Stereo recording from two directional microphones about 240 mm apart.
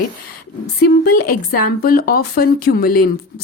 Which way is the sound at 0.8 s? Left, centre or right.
Left.